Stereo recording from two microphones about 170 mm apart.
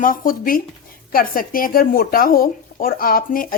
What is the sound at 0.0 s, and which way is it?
A woman's voice, 55° left (ahead or behind).